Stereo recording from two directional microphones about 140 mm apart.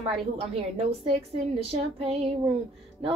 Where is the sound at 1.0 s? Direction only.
45° right (ahead or behind).